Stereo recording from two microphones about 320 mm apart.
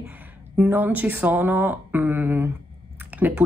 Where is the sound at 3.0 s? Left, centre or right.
Centre.